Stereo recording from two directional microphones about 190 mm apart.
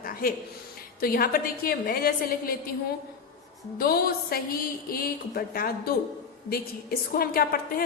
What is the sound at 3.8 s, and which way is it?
A woman's voice, 50° left (ahead or behind).